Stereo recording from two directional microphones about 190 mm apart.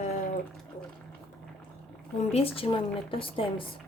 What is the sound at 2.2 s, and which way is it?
A woman's voice, 30° left (ahead or behind).